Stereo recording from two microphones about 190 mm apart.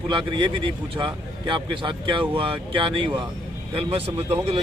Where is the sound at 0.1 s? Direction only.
25° right (ahead or behind).